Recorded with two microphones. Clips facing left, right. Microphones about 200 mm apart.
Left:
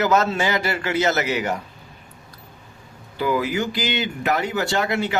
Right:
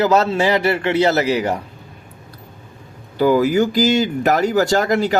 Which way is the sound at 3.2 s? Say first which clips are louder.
Right 8 dB; 40° right (ahead or behind).